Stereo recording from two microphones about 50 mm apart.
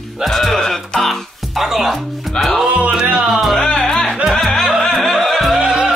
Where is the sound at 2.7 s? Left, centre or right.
Right.